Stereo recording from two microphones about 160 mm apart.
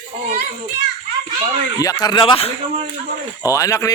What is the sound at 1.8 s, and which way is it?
Speech, 25° left (ahead or behind).